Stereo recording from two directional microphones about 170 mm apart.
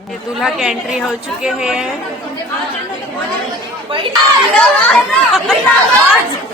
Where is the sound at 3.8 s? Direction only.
30° right (ahead or behind).